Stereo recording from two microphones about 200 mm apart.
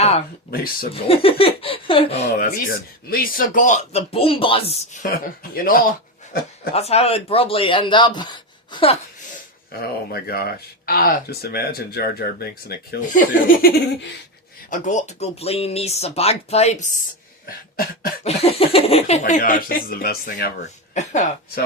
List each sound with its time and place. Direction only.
0.5 s speech: 45° left (ahead or behind)
1.0 s speech: 30° left (ahead or behind)
2.4 s speech: 45° left (ahead or behind); by 4.8 s 30° left (ahead or behind)
5.4 s speech: 45° left (ahead or behind)
6.7 s speech: 30° left (ahead or behind)
10.1 s speech: 50° left (ahead or behind)
17.4 s cough: 45° left (ahead or behind)
18.2 s speech: 30° left (ahead or behind)
19.2 s speech: 45° left (ahead or behind)
20.9 s speech: 35° left (ahead or behind)